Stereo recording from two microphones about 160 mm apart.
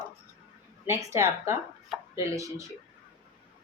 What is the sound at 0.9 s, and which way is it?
A woman's voice, 20° right (ahead or behind).